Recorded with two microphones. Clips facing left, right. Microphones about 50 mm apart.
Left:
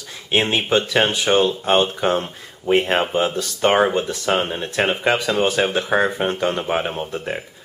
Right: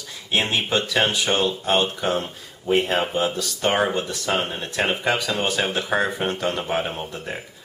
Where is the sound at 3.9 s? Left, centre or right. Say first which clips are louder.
Left 4 dB; centre.